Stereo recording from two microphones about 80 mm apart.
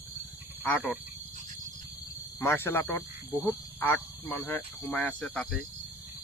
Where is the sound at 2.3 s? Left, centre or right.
Left; by 5.7 s centre.